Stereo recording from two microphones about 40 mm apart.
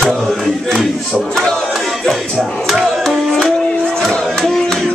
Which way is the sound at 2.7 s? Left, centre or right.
Centre.